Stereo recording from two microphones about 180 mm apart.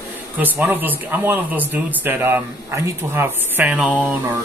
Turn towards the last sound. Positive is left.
turn(degrees=-5)  # may be behind; listen again after turning